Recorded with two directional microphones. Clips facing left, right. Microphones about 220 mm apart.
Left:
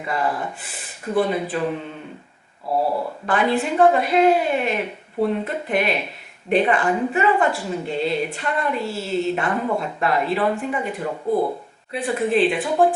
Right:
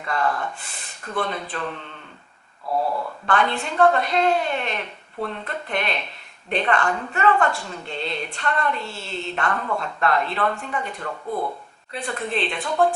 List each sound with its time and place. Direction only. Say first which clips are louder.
0.0 s a woman's voice: left 1 dB; 5° left (ahead or behind)
2.7 s speech: left 3 dB; 30° left (ahead or behind)
3.2 s a woman's voice: left 3 dB; 5° left (ahead or behind)
11.1 s speech: left 7 dB; 30° left (ahead or behind)
11.9 s a woman's voice: left 7 dB; 5° left (ahead or behind)